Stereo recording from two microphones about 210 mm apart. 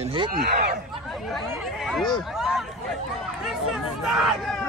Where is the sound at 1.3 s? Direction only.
Centre (ahead or behind).